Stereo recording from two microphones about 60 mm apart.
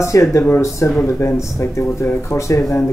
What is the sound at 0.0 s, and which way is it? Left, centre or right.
Speech, left.